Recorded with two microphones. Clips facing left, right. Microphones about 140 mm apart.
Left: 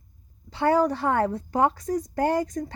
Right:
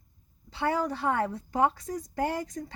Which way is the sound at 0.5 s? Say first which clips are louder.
Left 7 dB; 45° left (ahead or behind).